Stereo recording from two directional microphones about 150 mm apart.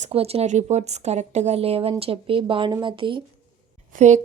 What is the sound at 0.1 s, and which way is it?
Speech, 40° right (ahead or behind).